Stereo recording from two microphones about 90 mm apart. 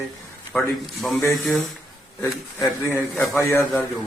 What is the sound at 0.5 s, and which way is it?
Speech, 5° left (ahead or behind).